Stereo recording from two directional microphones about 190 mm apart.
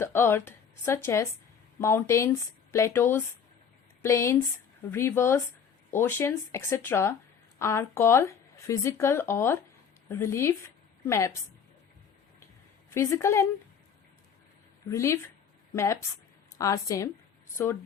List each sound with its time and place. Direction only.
0.0 s speech: 10° left (ahead or behind)
12.9 s speech: 15° left (ahead or behind)
14.8 s speech: 15° left (ahead or behind)